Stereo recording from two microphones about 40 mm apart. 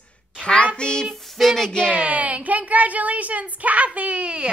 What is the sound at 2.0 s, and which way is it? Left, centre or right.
A woman's voice, right.